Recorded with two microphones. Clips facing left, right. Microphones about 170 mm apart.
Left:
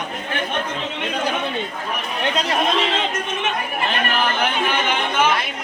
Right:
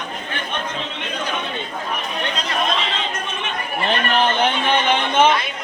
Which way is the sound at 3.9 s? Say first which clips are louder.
Right 4 dB; 25° right (ahead or behind).